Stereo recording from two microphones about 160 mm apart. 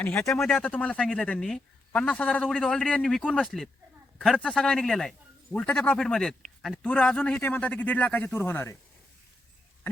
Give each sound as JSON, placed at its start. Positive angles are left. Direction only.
{"t": 0.0, "sound": "a man's voice", "side_deg": 15}